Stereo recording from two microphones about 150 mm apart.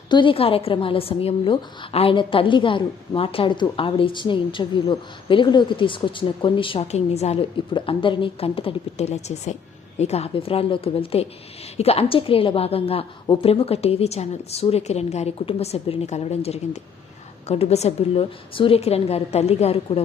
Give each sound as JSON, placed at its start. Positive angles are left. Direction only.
{"t": 0.1, "sound": "a woman's voice", "side_deg": 35}